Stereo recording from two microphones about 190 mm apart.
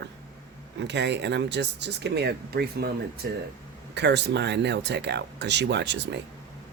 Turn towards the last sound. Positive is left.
turn(degrees=-65)  # may be behind; listen again after turning